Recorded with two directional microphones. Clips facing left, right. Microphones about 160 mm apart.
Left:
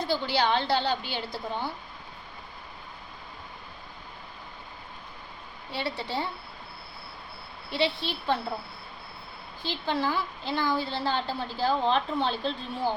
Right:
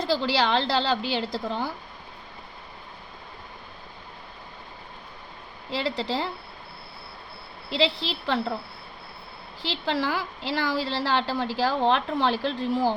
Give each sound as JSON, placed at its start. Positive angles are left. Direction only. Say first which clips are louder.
{"t": 0.0, "sound": "a woman's voice", "louder": "right 3 dB", "side_deg": -90}
{"t": 5.7, "sound": "a woman's voice", "louder": "right 4 dB", "side_deg": -90}
{"t": 7.7, "sound": "a woman's voice", "louder": "right 3 dB", "side_deg": -90}
{"t": 9.6, "sound": "a woman's voice", "louder": "right 2 dB", "side_deg": -90}